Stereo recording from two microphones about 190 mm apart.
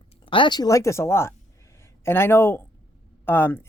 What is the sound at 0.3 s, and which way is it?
Speech, 25° left (ahead or behind).